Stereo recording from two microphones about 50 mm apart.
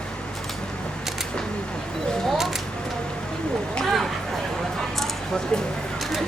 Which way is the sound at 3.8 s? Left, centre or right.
Centre.